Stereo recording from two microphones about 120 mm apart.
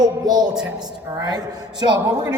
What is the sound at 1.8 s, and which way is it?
Speech, 35° right (ahead or behind).